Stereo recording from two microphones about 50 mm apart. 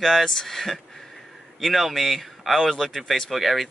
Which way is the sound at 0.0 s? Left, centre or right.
Centre.